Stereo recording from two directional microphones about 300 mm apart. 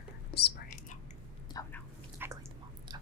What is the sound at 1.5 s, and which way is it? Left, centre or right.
Biting, centre.